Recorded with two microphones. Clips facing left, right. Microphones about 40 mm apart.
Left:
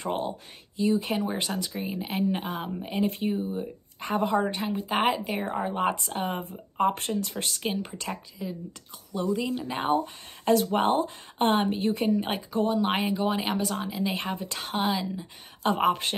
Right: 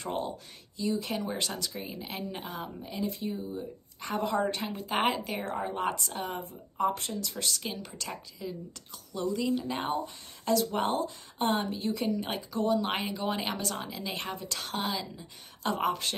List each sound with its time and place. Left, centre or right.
0.8 s speech: left
4.0 s speech: centre
4.9 s speech: centre
5.2 s speech: centre
6.4 s speech: left
8.1 s speech: centre
9.8 s speech: left
12.8 s speech: centre
14.3 s speech: left